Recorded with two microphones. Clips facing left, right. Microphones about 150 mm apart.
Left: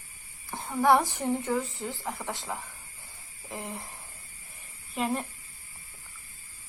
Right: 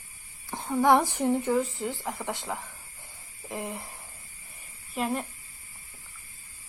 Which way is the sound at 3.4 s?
15° right (ahead or behind).